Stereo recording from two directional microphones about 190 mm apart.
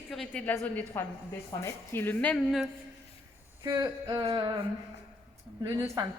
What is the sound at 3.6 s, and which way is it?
Speech, 20° right (ahead or behind).